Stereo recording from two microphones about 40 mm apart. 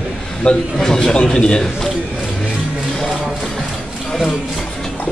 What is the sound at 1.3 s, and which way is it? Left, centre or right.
Speech, left.